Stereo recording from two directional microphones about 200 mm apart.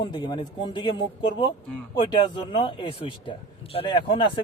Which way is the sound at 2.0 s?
25° left (ahead or behind).